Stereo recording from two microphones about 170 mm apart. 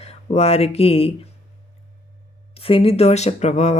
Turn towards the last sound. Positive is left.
turn(degrees=40)  # may be behind; listen again after turning